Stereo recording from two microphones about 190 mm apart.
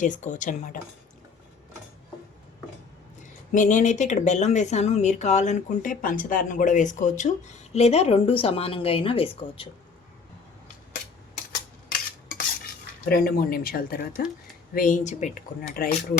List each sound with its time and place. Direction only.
0.0 s speech: 40° left (ahead or behind)
3.2 s speech: 40° left (ahead or behind)
11.9 s a sound: 50° left (ahead or behind)
13.1 s speech: 50° left (ahead or behind)